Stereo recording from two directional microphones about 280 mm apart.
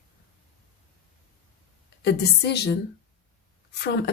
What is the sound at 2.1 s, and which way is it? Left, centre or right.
Speech, left.